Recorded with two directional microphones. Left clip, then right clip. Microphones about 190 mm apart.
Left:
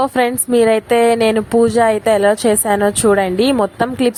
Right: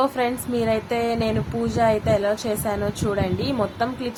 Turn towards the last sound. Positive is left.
turn(degrees=45)  # may be behind; listen again after turning